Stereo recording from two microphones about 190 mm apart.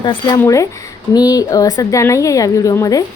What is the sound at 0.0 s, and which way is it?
A woman's voice, 20° left (ahead or behind).